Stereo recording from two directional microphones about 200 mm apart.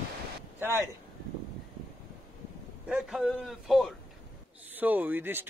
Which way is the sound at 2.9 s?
5° right (ahead or behind).